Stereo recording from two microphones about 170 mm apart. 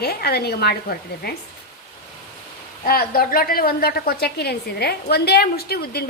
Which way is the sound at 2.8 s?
60° left (ahead or behind).